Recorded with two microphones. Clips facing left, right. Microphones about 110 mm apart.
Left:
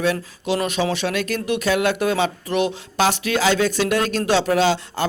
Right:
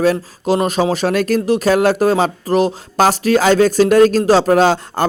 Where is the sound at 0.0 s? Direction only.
40° right (ahead or behind).